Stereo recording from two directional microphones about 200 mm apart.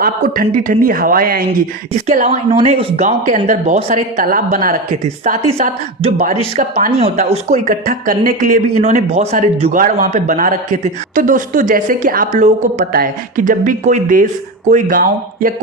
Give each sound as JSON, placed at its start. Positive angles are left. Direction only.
{"t": 0.0, "sound": "speech", "side_deg": -45}
{"t": 2.0, "sound": "speech", "side_deg": -30}